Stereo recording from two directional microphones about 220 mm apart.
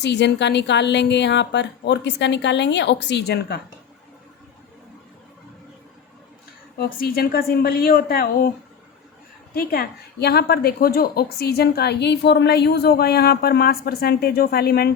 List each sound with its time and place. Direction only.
0.0 s a woman's voice: 50° left (ahead or behind)
6.7 s a woman's voice: 45° left (ahead or behind)
9.6 s a woman's voice: 45° left (ahead or behind)